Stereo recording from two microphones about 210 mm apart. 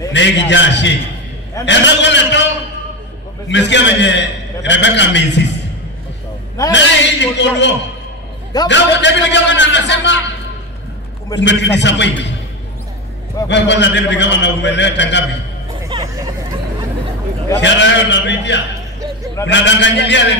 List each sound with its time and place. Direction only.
0.1 s a man's voice: 60° left (ahead or behind)
3.4 s a man's voice: 60° left (ahead or behind)
6.7 s a man's voice: 55° left (ahead or behind)
11.3 s a man's voice: 55° left (ahead or behind)
13.5 s a man's voice: 55° left (ahead or behind)
15.8 s hubbub: 15° right (ahead or behind)
17.6 s a man's voice: 60° left (ahead or behind)